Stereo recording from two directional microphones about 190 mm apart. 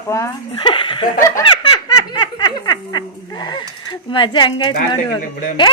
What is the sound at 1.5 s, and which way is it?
Snicker, 25° left (ahead or behind).